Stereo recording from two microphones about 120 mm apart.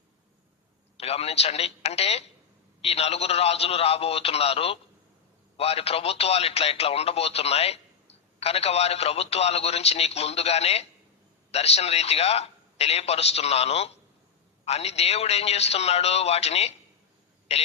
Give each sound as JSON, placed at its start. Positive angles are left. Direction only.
{"t": 0.9, "sound": "speech", "side_deg": 60}